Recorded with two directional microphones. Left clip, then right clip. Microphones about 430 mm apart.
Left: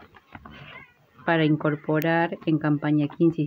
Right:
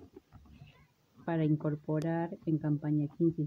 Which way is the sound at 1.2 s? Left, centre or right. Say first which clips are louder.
Left 11 dB; right.